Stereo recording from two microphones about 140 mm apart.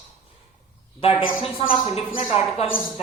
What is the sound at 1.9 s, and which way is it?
Speech, 45° left (ahead or behind).